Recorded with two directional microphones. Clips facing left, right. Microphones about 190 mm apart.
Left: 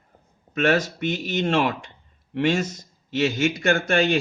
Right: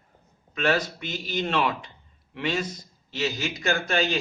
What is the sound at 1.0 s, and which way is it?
Speech, 50° left (ahead or behind).